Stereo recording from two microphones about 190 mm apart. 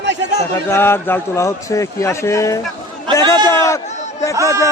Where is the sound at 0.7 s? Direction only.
10° left (ahead or behind).